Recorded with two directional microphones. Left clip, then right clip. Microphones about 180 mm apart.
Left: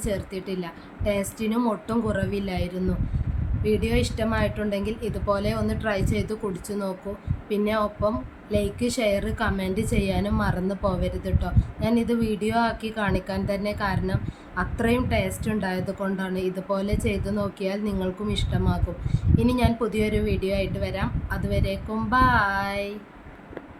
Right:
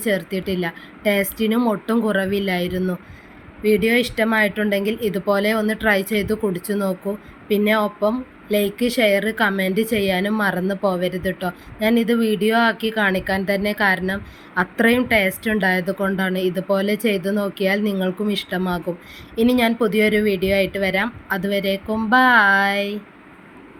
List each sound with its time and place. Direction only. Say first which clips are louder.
0.0 s speech: right 8 dB; 20° right (ahead or behind)